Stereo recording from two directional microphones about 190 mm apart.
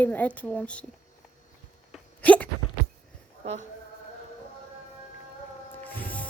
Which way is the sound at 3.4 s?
35° right (ahead or behind).